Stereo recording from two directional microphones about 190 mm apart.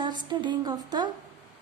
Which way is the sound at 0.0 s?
25° right (ahead or behind).